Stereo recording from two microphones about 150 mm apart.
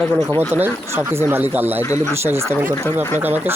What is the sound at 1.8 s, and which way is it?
Speech, 20° left (ahead or behind).